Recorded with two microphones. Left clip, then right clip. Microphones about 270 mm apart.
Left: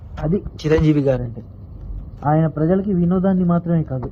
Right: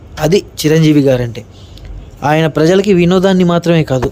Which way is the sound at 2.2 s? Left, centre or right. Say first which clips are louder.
Right 8 dB; right.